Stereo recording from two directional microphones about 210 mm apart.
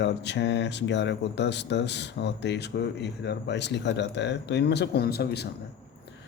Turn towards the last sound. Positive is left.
turn(degrees=50)  # may be behind; listen again after turning